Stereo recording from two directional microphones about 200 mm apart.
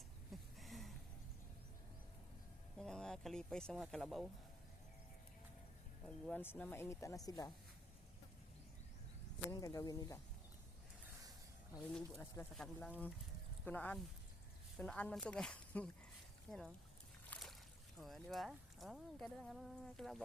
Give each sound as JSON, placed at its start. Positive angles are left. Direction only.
{"t": 0.6, "sound": "a sound", "side_deg": 0}
{"t": 2.7, "sound": "speech", "side_deg": 5}
{"t": 6.1, "sound": "speech", "side_deg": 5}
{"t": 9.5, "sound": "speech", "side_deg": 15}
{"t": 12.1, "sound": "speech", "side_deg": 10}
{"t": 17.2, "sound": "a sound", "side_deg": 5}
{"t": 18.0, "sound": "speech", "side_deg": 0}